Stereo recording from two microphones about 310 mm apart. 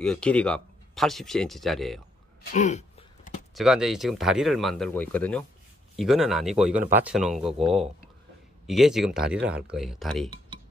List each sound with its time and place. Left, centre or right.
0.0 s speech: centre
2.5 s a sound: left
3.5 s speech: centre